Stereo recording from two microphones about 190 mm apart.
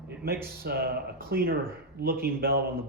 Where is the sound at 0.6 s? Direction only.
50° right (ahead or behind).